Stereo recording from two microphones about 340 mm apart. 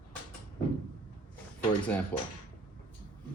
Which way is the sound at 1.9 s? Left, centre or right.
Centre.